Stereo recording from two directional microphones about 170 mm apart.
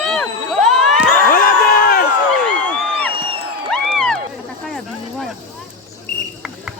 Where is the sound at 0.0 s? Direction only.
5° left (ahead or behind).